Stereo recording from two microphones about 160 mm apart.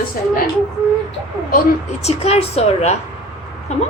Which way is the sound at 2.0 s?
40° left (ahead or behind).